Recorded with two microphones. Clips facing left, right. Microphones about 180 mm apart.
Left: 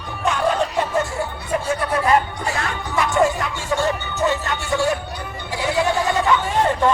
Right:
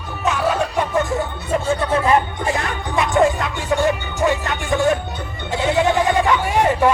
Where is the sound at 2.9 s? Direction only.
20° right (ahead or behind).